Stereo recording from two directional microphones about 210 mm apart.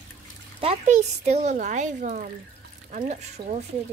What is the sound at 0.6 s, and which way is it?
Speech, 30° right (ahead or behind).